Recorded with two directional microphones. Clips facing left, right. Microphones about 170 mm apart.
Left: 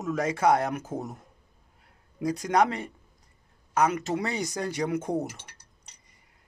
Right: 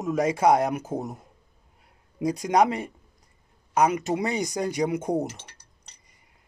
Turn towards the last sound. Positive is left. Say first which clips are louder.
# right 3 dB
turn(degrees=-15)  # may be behind; listen again after turning